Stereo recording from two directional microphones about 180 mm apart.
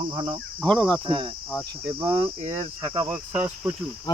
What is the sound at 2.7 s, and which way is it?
Speech, 20° right (ahead or behind).